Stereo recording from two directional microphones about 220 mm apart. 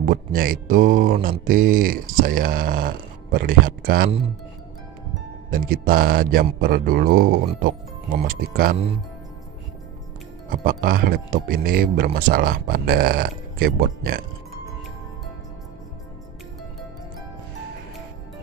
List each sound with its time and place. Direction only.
0.0 s speech: 40° right (ahead or behind)
5.5 s speech: 40° right (ahead or behind)
10.5 s speech: 40° right (ahead or behind)